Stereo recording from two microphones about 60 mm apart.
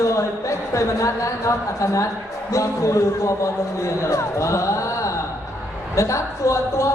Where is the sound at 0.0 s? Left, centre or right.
Left.